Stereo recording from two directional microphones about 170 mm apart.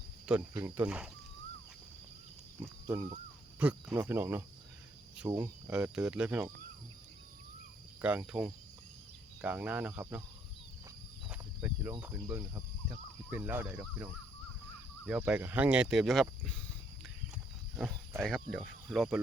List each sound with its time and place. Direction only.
0.3 s speech: 5° right (ahead or behind)
2.8 s speech: 15° right (ahead or behind)
8.0 s speech: 10° right (ahead or behind)
11.3 s speech: 10° right (ahead or behind)
18.2 s speech: centre (ahead or behind)